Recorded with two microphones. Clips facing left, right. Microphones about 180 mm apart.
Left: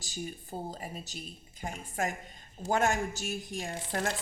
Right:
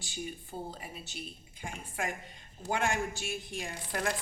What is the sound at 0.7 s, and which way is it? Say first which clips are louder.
A woman's voice: left 3 dB; 40° left (ahead or behind).